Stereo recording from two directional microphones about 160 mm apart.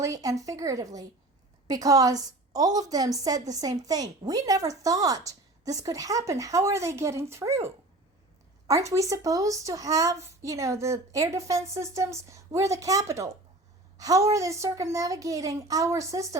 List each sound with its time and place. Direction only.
0.0 s a woman's voice: 20° right (ahead or behind)